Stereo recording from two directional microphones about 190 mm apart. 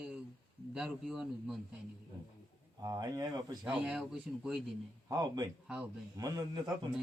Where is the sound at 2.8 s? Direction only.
20° right (ahead or behind).